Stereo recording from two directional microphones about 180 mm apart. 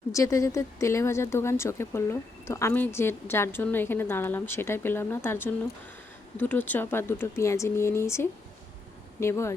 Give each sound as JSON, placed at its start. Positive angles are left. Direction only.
{"t": 0.1, "sound": "speech", "side_deg": 15}